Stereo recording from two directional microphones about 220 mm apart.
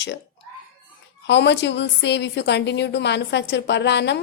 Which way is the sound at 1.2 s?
50° left (ahead or behind).